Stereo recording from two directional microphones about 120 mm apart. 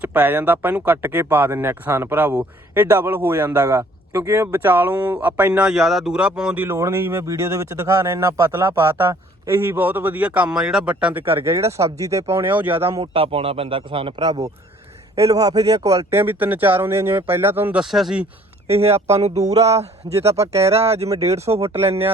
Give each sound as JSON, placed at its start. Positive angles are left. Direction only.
{"t": 0.0, "sound": "speech", "side_deg": -15}
{"t": 6.7, "sound": "speech", "side_deg": -25}
{"t": 9.5, "sound": "speech", "side_deg": -15}
{"t": 13.0, "sound": "a man's voice", "side_deg": -50}
{"t": 15.1, "sound": "speech", "side_deg": -30}
{"t": 16.2, "sound": "speech", "side_deg": -15}
{"t": 17.8, "sound": "speech", "side_deg": 0}
{"t": 18.8, "sound": "speech", "side_deg": -60}
{"t": 19.2, "sound": "music", "side_deg": -70}
{"t": 19.5, "sound": "speech", "side_deg": -30}
{"t": 20.4, "sound": "speech", "side_deg": -25}
{"t": 20.7, "sound": "speech", "side_deg": -60}
{"t": 21.5, "sound": "speech", "side_deg": -40}